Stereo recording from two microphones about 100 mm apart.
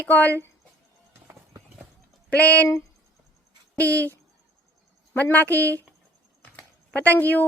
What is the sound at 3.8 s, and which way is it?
Speech, 15° left (ahead or behind).